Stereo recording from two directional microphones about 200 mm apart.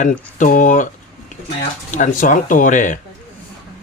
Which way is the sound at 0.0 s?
40° left (ahead or behind).